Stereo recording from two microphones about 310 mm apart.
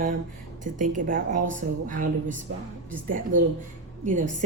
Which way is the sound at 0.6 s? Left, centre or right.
Right.